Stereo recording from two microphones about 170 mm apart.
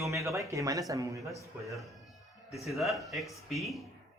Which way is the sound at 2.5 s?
Centre (ahead or behind).